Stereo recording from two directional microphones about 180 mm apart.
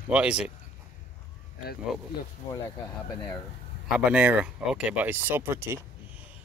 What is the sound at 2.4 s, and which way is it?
Speech, 15° left (ahead or behind).